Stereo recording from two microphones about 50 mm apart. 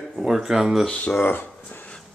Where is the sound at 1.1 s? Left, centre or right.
Left.